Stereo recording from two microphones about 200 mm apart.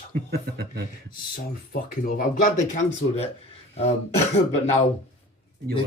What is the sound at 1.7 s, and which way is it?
Speech, 50° left (ahead or behind).